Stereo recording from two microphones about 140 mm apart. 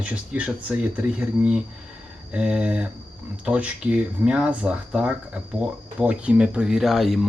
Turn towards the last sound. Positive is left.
turn(degrees=0)  # may be behind; listen again after turning